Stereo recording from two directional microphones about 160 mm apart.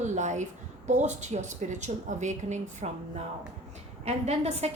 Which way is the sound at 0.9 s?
45° right (ahead or behind).